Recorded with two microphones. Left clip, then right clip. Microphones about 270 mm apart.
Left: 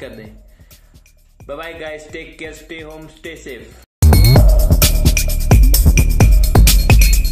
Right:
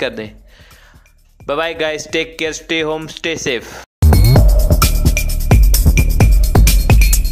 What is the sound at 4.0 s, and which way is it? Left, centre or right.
Music, centre.